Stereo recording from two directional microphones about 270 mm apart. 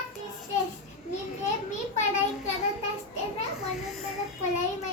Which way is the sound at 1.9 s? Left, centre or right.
Left.